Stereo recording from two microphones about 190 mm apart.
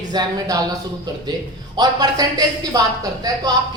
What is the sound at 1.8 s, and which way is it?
A woman's voice, 20° right (ahead or behind).